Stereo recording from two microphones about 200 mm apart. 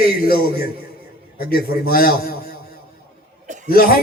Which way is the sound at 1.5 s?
50° left (ahead or behind).